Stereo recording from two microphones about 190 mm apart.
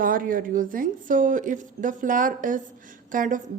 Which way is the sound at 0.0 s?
45° right (ahead or behind).